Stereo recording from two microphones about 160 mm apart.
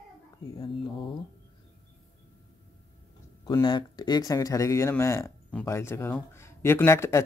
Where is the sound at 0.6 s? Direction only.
30° left (ahead or behind).